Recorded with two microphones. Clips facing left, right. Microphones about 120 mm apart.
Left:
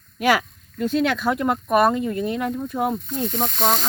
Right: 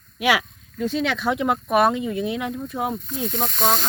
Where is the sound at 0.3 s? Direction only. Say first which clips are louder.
Left 2 dB; 10° right (ahead or behind).